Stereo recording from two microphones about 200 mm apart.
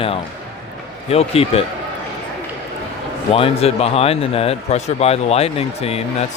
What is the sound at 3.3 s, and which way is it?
A man's voice, 30° left (ahead or behind).